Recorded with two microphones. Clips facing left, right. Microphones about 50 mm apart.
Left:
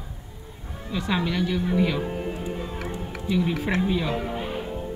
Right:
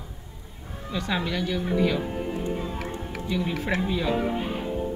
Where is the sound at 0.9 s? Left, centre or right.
Centre.